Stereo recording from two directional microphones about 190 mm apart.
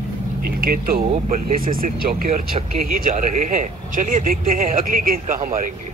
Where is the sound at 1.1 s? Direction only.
40° right (ahead or behind).